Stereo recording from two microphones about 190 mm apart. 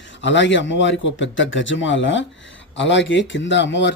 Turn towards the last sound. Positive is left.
turn(degrees=70)  # may be behind; listen again after turning